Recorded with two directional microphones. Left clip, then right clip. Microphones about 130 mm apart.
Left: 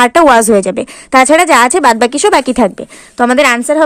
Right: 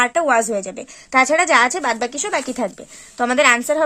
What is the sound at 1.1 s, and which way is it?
A woman's voice, 35° left (ahead or behind).